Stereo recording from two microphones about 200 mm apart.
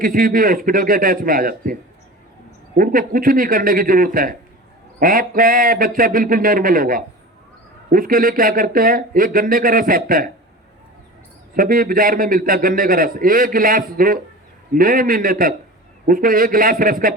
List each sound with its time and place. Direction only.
0.0 s a man's voice: 45° right (ahead or behind)
11.5 s a man's voice: 45° right (ahead or behind)